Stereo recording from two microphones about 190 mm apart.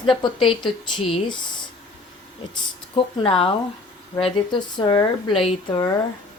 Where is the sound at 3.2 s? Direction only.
30° left (ahead or behind).